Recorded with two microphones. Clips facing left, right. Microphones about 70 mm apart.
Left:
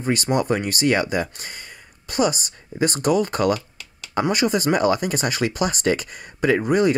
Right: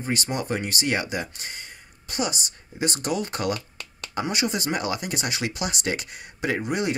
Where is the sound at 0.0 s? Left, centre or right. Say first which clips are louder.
Left 7 dB; left.